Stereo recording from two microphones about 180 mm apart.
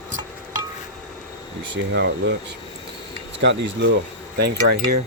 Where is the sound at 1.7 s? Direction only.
90° right.